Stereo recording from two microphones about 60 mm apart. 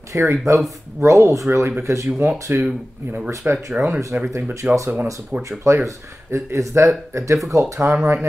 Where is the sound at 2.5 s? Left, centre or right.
Right.